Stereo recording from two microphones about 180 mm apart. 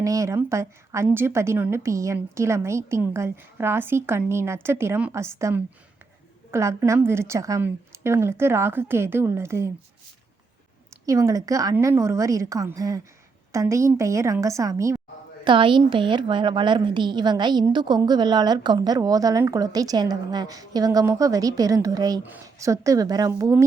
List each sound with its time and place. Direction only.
0.0 s a woman's voice: 20° right (ahead or behind)
11.0 s a woman's voice: 20° right (ahead or behind)
15.4 s a woman's voice: 25° right (ahead or behind)